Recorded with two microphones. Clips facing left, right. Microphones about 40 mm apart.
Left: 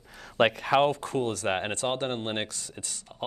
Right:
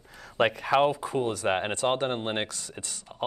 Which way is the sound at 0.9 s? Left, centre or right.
Centre.